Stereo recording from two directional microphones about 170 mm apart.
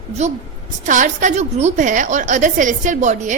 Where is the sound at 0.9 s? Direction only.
50° right (ahead or behind).